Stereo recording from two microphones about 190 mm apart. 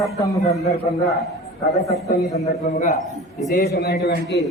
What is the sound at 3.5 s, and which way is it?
Speech, 60° left (ahead or behind).